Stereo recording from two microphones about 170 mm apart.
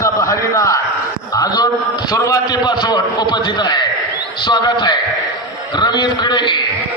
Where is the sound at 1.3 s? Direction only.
20° left (ahead or behind).